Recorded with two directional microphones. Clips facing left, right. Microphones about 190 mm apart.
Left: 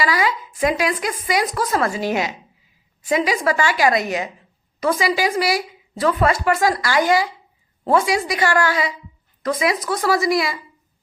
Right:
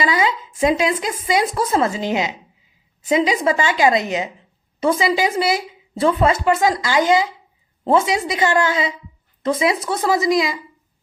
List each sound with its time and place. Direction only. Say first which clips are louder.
0.0 s a woman's voice: right 1 dB; 20° right (ahead or behind)